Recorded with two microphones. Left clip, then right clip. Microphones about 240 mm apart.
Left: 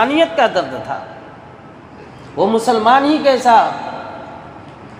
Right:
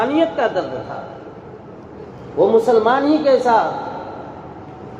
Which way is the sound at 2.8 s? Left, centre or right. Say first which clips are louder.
Left 4 dB; left.